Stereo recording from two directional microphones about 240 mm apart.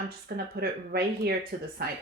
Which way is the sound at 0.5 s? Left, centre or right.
Right.